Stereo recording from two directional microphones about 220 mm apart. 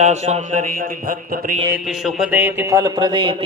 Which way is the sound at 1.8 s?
Centre (ahead or behind).